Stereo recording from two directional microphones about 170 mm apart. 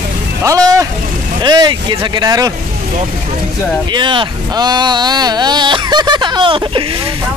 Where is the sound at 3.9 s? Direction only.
30° right (ahead or behind).